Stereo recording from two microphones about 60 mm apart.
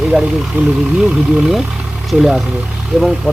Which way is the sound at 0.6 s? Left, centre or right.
Right.